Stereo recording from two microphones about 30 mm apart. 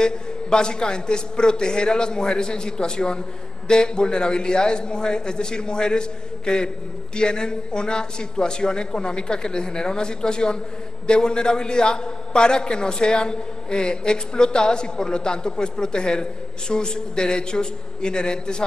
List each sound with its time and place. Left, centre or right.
0.0 s a man's voice: left